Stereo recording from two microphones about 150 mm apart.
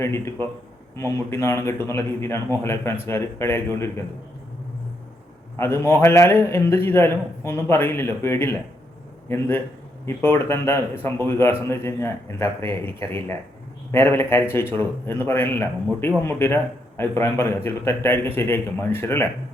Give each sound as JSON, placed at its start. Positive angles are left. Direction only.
{"t": 0.0, "sound": "a man's voice", "side_deg": 15}
{"t": 5.5, "sound": "a man's voice", "side_deg": 15}
{"t": 10.2, "sound": "a man's voice", "side_deg": 15}